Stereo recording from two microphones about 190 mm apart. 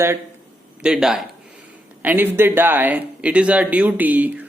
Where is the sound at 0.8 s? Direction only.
5° right (ahead or behind).